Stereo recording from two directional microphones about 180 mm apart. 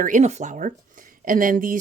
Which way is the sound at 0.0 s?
40° right (ahead or behind).